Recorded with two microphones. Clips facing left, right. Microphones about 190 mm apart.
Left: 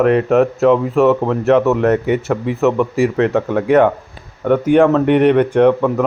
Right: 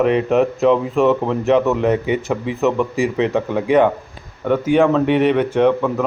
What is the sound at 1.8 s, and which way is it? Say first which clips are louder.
A man's voice: left 3 dB; 15° right (ahead or behind).